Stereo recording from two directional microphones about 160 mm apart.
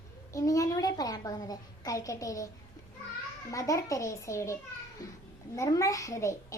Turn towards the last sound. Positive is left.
turn(degrees=20)  # may be behind; listen again after turning